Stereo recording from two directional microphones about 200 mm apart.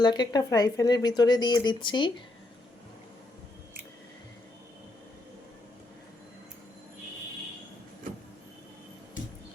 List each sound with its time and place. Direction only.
0.0 s speech: 20° left (ahead or behind)